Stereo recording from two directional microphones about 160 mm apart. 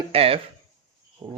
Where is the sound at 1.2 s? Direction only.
25° right (ahead or behind).